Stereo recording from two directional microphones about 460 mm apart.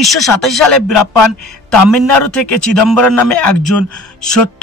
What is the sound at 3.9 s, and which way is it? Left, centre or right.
Speech, left.